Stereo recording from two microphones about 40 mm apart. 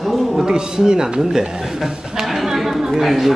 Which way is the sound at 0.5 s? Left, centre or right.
Centre.